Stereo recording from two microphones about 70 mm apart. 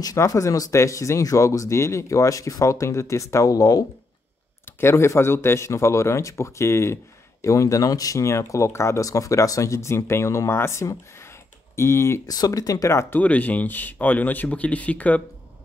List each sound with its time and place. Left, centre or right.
0.0 s speech: left
4.6 s speech: left
12.3 s speech: left
13.1 s speech: left